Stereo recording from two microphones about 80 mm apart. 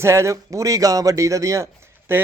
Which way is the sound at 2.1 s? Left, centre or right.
Right.